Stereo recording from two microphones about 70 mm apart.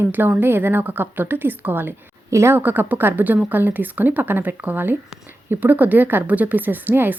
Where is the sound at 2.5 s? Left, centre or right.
Right.